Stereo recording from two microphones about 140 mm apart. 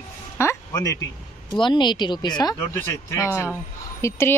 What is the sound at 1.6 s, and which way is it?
Speech, 35° left (ahead or behind).